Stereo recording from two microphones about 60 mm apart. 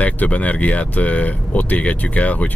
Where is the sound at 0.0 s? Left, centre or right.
Left.